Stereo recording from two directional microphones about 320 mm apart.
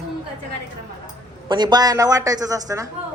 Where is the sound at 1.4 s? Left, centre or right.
Centre.